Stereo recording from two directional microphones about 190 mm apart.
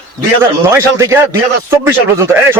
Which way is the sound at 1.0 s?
15° right (ahead or behind).